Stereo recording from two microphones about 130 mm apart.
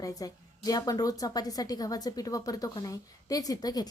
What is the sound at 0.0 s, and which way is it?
A woman's voice, 30° left (ahead or behind).